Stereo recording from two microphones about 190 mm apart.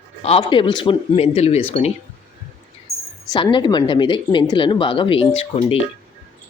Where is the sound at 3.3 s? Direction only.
25° left (ahead or behind).